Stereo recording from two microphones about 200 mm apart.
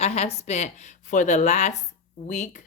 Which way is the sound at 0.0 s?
30° left (ahead or behind).